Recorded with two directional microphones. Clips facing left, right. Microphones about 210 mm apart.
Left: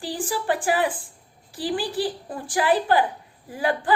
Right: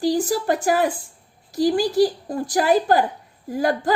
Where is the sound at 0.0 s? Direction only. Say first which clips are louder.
Right 8 dB; 40° right (ahead or behind).